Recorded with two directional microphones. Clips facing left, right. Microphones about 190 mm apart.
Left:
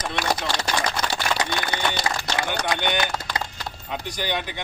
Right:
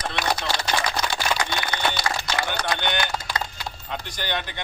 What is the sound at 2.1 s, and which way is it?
Run, 20° left (ahead or behind).